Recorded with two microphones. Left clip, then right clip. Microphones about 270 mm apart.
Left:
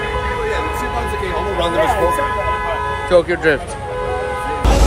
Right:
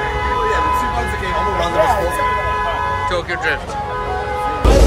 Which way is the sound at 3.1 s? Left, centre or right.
Centre.